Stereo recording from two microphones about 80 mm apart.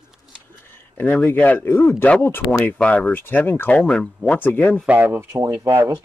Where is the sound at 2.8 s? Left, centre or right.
Centre.